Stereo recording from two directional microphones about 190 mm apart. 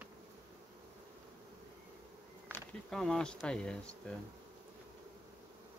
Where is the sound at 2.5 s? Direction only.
5° left (ahead or behind).